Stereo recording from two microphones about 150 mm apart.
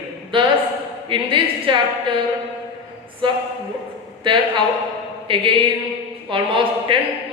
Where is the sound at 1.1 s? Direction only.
35° right (ahead or behind).